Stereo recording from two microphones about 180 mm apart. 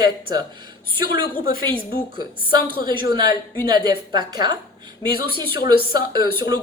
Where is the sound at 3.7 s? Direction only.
25° right (ahead or behind).